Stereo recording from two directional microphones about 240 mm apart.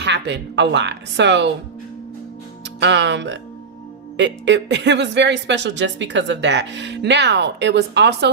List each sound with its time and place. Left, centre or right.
0.0 s speech: right
2.8 s speech: right